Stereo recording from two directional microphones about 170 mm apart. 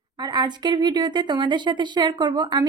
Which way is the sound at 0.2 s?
25° right (ahead or behind).